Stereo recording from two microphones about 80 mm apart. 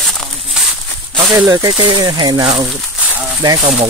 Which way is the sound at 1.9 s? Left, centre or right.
Right.